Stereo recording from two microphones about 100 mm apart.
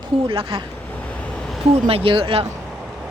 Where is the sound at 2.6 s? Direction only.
5° right (ahead or behind).